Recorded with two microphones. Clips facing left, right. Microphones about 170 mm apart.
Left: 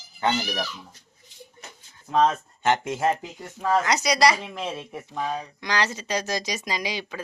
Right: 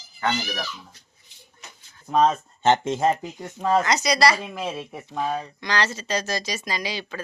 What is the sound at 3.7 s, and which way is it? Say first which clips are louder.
Speech: right 1 dB; 10° left (ahead or behind).